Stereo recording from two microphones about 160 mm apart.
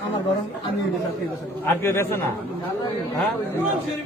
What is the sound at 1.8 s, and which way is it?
Speech, 15° left (ahead or behind).